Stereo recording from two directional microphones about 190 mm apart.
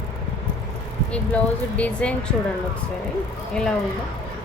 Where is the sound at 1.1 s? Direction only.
5° left (ahead or behind).